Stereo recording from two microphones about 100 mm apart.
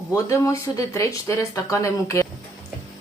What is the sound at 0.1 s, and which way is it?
A woman's voice, 30° left (ahead or behind).